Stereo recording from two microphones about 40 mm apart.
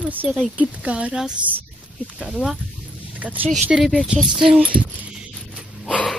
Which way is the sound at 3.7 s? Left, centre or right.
Centre.